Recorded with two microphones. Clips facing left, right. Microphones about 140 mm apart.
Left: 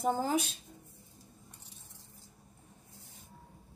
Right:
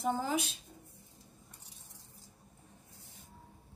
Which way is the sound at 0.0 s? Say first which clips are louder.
Left 3 dB; 40° left (ahead or behind).